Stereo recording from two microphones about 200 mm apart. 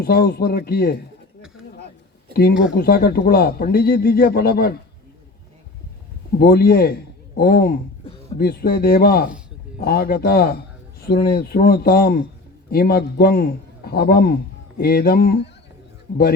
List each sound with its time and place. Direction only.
0.0 s speech: 50° left (ahead or behind)
2.3 s speech: 50° left (ahead or behind)
6.4 s speech: 50° left (ahead or behind)